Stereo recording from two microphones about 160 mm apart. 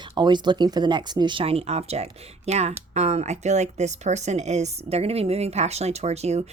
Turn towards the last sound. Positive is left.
turn(degrees=-40)  # may be behind; listen again after turning